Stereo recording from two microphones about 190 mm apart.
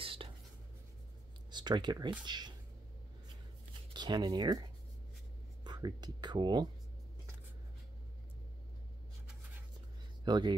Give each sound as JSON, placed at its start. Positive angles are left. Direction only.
{"t": 0.0, "sound": "writing", "side_deg": -30}
{"t": 1.5, "sound": "speech", "side_deg": -25}
{"t": 3.9, "sound": "speech", "side_deg": -25}
{"t": 10.2, "sound": "speech", "side_deg": -20}